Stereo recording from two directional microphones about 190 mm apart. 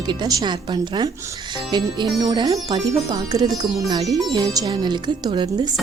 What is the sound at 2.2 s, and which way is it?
Speech, 20° right (ahead or behind).